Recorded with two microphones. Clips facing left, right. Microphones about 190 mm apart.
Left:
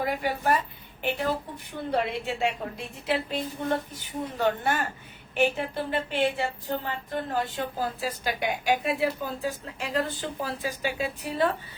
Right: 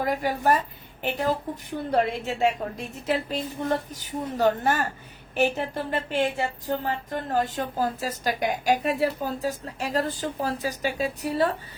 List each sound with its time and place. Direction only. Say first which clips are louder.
0.0 s speech: right 3 dB; 40° right (ahead or behind)
1.9 s a woman's voice: right 3 dB; 40° right (ahead or behind)